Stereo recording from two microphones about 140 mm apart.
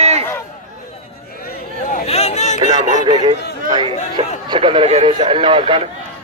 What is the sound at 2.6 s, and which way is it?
Speech, 55° left (ahead or behind).